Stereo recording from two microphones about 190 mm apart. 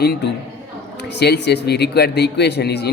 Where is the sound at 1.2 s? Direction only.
65° left (ahead or behind).